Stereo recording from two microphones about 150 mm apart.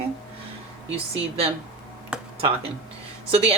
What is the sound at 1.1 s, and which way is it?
Speech, 40° right (ahead or behind).